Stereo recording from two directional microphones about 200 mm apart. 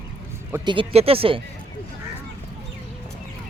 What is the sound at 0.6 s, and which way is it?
Speech, 25° right (ahead or behind).